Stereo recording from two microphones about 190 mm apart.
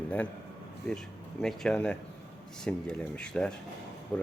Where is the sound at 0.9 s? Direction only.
5° left (ahead or behind).